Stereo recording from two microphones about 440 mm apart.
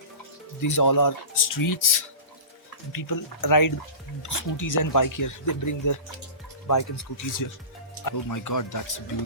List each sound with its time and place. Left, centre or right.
0.6 s speech: left